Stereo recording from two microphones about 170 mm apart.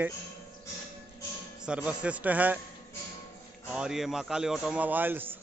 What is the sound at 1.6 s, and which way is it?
A man's voice, 5° right (ahead or behind).